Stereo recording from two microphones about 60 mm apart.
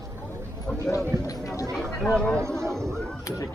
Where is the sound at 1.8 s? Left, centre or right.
Centre.